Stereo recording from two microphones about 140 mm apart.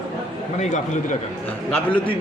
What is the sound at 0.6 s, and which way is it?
Speech, 60° left (ahead or behind).